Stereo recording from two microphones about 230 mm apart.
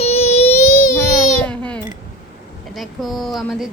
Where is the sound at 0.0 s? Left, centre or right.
Left.